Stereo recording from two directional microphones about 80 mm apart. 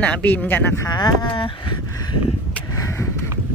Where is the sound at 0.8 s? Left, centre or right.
Left.